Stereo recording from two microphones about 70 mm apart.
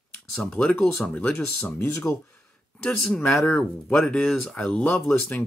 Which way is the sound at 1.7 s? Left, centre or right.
Left.